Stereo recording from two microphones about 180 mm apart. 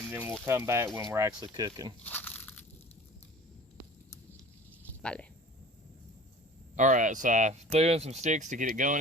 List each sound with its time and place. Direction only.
0.1 s speech: 10° right (ahead or behind)
2.0 s crunch: 10° left (ahead or behind)
4.9 s a sound: 5° left (ahead or behind)
6.7 s speech: 45° right (ahead or behind)